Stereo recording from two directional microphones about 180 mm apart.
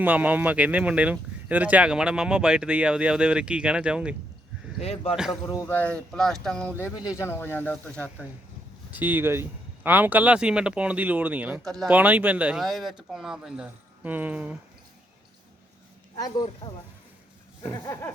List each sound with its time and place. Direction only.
0.0 s speech: 10° right (ahead or behind)
4.8 s speech: 35° left (ahead or behind)
5.3 s speech: 20° left (ahead or behind)
8.9 s speech: 10° right (ahead or behind)
16.6 s speech: 30° left (ahead or behind)